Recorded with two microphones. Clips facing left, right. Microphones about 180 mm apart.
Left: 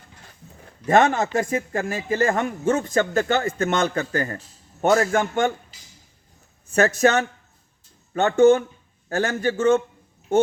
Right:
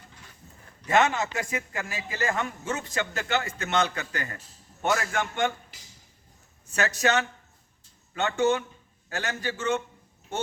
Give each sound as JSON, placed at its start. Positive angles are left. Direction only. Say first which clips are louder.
{"t": 0.9, "sound": "a man's voice", "louder": "left 6 dB", "side_deg": 50}
{"t": 6.7, "sound": "a man's voice", "louder": "left 7 dB", "side_deg": 50}